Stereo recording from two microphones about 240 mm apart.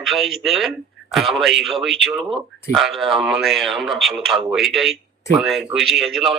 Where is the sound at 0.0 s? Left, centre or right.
Centre.